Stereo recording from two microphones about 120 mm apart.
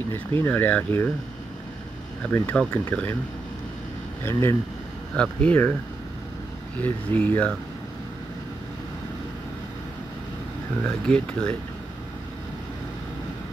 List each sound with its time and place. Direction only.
0.1 s speech: 20° left (ahead or behind)
2.2 s speech: 10° left (ahead or behind)
4.2 s speech: 20° left (ahead or behind)
5.1 s speech: 10° left (ahead or behind)
6.8 s speech: 15° left (ahead or behind)
10.8 s speech: 10° left (ahead or behind)